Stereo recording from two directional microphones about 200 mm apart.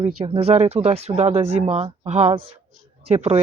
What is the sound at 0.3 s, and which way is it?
Speech, 30° right (ahead or behind).